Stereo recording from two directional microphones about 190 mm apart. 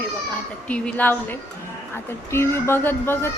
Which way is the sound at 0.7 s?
10° left (ahead or behind).